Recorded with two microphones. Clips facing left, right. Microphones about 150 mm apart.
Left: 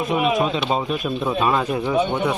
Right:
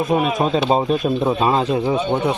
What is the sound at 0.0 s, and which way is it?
Speech, 45° right (ahead or behind).